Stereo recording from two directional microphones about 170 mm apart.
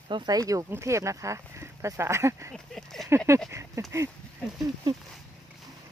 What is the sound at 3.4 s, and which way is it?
Speech, 15° right (ahead or behind).